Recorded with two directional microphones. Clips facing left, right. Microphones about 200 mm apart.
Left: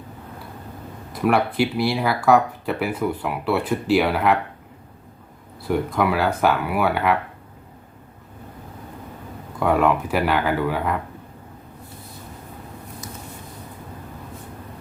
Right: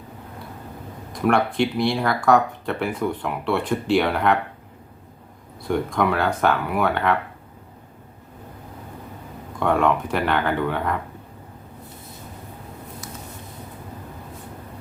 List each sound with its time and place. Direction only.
1.1 s speech: 5° left (ahead or behind)
5.6 s speech: 5° left (ahead or behind)
9.6 s speech: 5° left (ahead or behind)